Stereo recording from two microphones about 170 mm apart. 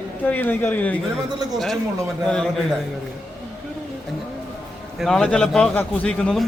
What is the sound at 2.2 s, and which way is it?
Speech, 5° left (ahead or behind).